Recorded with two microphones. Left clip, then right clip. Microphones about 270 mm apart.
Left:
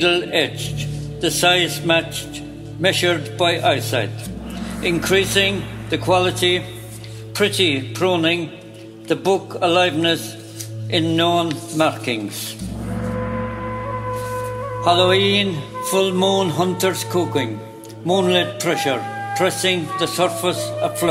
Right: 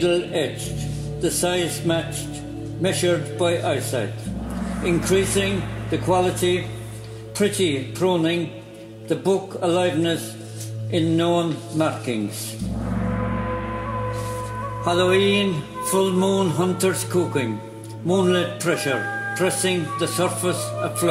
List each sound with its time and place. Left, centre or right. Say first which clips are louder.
0.0 s speech: left 4 dB; left
9.6 s speech: left 4 dB; left
14.9 s speech: left 4 dB; left